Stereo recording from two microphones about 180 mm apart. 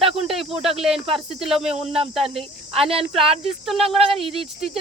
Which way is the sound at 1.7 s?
30° right (ahead or behind).